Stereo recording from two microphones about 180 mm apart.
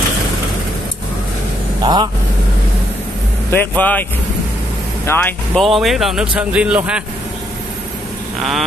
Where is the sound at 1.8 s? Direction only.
25° right (ahead or behind).